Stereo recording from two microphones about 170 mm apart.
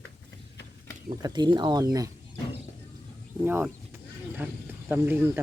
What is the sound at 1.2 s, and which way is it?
Speech, 25° right (ahead or behind).